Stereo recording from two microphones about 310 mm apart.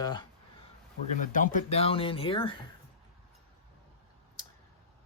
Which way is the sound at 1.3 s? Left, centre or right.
Left.